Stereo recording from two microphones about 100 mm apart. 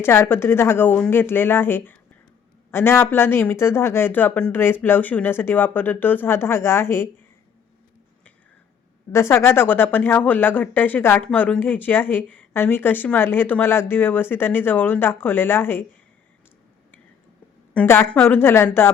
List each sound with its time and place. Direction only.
0.0 s speech: 25° left (ahead or behind)
9.1 s speech: 25° left (ahead or behind)
11.2 s speech: 10° left (ahead or behind)
17.8 s speech: 25° left (ahead or behind)